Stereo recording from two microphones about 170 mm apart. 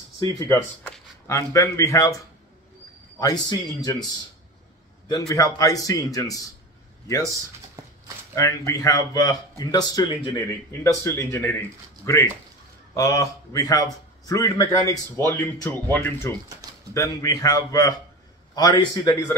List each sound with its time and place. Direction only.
0.5 s speech: 10° left (ahead or behind)
3.2 s a man's voice: 20° left (ahead or behind)
5.3 s a man's voice: 20° left (ahead or behind)